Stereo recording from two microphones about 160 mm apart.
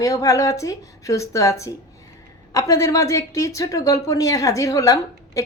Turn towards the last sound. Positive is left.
turn(degrees=20)  # may be behind; listen again after turning